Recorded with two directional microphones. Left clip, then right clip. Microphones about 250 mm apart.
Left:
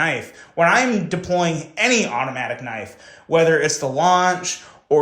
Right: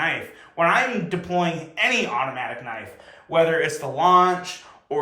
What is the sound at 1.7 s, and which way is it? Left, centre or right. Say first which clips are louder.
Speech: left 3 dB; left.